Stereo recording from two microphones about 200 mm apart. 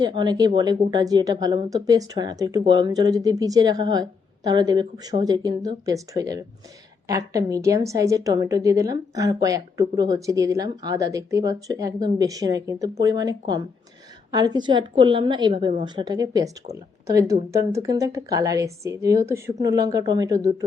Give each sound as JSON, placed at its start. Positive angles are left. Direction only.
{"t": 0.0, "sound": "a woman's voice", "side_deg": -20}